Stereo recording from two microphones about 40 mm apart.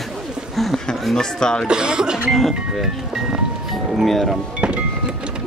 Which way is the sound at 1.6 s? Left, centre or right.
Centre.